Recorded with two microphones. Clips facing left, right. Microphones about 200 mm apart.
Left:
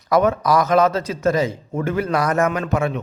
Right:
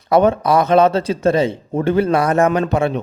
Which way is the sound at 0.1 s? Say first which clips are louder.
Right 3 dB; 30° right (ahead or behind).